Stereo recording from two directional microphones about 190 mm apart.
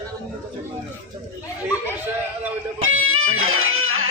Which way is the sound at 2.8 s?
90° right.